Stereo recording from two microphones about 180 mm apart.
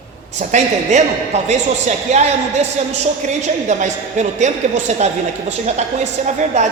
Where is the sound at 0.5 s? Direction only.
40° right (ahead or behind).